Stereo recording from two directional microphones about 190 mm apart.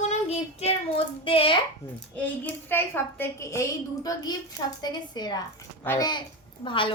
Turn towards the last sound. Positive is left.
turn(degrees=25)  # may be behind; listen again after turning